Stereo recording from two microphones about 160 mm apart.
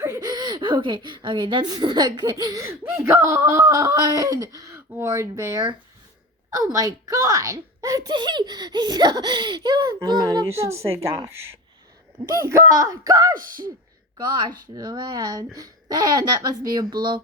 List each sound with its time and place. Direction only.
0.0 s a woman's voice: 20° right (ahead or behind)
12.2 s a woman's voice: 20° right (ahead or behind)
13.3 s speech: 60° right (ahead or behind)
14.2 s a woman's voice: 30° right (ahead or behind)